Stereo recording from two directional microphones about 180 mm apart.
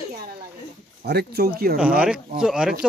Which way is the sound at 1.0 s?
65° right (ahead or behind).